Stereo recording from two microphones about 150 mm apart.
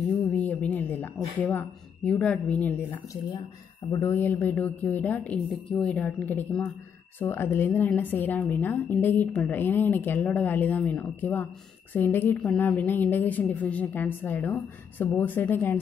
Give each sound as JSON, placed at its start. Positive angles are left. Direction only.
{"t": 0.3, "sound": "a woman's voice", "side_deg": 10}